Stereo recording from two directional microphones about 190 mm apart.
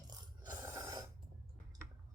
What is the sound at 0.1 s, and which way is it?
Mechanisms, 20° right (ahead or behind).